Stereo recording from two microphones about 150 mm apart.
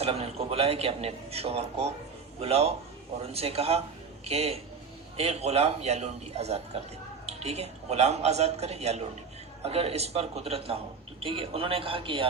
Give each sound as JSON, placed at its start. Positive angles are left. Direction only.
{"t": 0.0, "sound": "a man's voice", "side_deg": -40}